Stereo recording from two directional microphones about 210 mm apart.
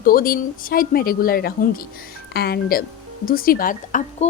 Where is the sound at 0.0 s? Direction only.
45° left (ahead or behind).